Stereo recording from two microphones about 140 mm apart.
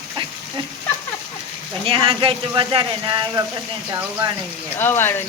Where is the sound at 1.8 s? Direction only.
40° right (ahead or behind).